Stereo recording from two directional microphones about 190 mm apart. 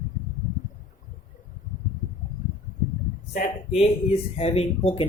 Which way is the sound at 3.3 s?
45° left (ahead or behind).